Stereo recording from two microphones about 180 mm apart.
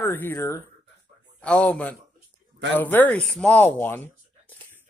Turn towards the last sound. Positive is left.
turn(degrees=10)  # may be behind; listen again after turning